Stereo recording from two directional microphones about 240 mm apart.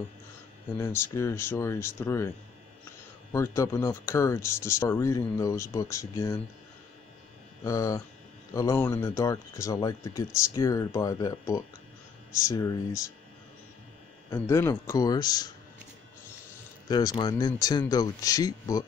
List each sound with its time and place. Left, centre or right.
0.7 s speech: centre
3.3 s speech: centre
7.6 s speech: centre
14.3 s speech: centre
16.8 s speech: centre